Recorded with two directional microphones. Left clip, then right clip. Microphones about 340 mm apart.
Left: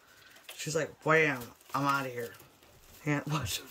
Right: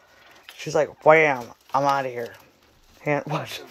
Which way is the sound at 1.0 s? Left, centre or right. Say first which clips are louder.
Right 11 dB; centre.